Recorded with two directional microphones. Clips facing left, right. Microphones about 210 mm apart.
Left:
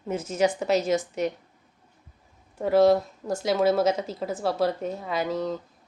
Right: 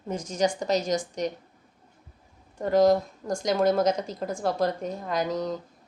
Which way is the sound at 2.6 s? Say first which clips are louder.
Left 1 dB; 5° left (ahead or behind).